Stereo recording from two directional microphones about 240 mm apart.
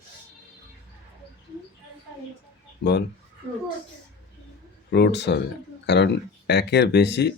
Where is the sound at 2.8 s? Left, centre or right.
Left.